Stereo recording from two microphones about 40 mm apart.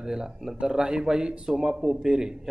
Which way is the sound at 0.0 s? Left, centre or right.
Centre.